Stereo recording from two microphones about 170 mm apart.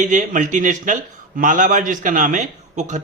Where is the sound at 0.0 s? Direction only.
50° right (ahead or behind).